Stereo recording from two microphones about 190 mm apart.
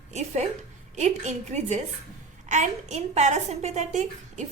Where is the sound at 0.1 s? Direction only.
35° right (ahead or behind).